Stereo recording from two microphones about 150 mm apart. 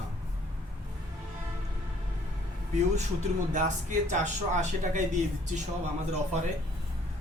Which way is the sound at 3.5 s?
55° right (ahead or behind).